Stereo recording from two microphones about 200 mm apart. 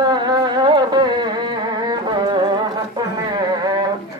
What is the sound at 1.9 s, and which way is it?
Carnatic music, 20° right (ahead or behind).